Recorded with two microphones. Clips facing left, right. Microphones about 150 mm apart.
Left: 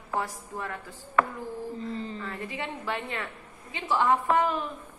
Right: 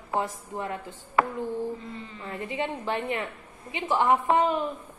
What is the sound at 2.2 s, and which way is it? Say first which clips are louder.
A woman's voice: right 4 dB; 20° right (ahead or behind).